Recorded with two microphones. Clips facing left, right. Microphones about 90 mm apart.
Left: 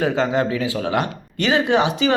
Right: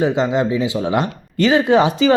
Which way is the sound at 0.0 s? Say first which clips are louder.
Right 2 dB; 20° right (ahead or behind).